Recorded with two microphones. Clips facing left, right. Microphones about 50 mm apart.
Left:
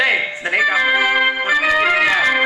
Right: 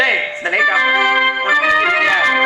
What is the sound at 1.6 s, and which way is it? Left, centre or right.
Organ, centre.